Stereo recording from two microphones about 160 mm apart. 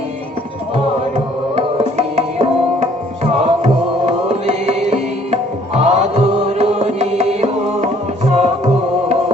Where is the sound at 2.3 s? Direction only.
40° right (ahead or behind).